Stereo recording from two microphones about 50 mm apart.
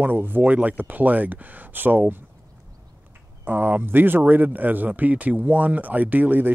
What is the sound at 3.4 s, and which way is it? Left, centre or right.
Speech, right.